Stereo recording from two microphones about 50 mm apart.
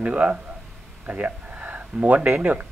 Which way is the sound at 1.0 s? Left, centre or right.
Right.